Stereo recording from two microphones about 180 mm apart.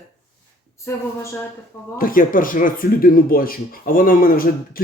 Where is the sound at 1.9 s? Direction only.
50° left (ahead or behind).